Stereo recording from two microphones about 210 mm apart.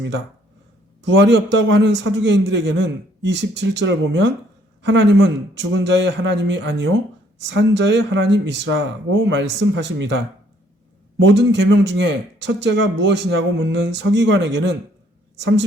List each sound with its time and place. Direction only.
1.0 s a man's voice: 55° right (ahead or behind)
11.2 s a man's voice: 55° right (ahead or behind)